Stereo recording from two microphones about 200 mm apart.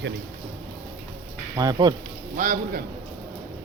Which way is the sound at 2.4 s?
40° right (ahead or behind).